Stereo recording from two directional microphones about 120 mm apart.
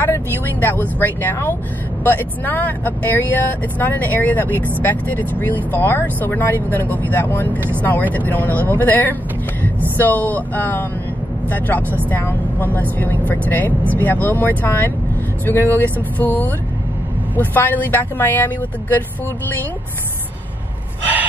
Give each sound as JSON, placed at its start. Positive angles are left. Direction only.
{"t": 0.0, "sound": "speech", "side_deg": 20}
{"t": 5.7, "sound": "speech", "side_deg": 15}
{"t": 17.6, "sound": "speech", "side_deg": 15}